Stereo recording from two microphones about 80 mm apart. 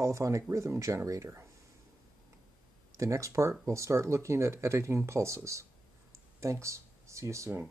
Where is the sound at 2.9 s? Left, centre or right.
Right.